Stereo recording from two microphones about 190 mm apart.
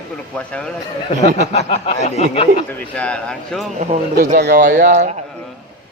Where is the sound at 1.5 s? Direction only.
30° left (ahead or behind).